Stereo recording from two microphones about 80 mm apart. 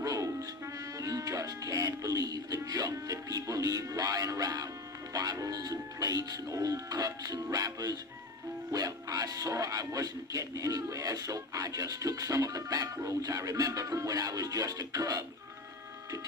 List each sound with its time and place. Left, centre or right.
0.0 s music: right
0.9 s speech: right